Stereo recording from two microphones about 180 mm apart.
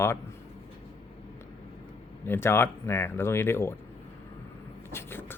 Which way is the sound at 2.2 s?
10° left (ahead or behind).